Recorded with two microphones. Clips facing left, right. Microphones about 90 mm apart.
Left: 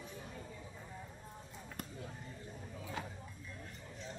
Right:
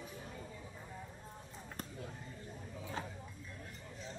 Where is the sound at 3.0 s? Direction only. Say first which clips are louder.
Right 1 dB; 35° right (ahead or behind).